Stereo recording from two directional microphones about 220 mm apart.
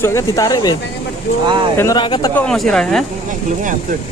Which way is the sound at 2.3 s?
5° left (ahead or behind).